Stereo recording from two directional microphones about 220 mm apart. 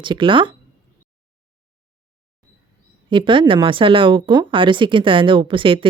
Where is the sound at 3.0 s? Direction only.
20° right (ahead or behind).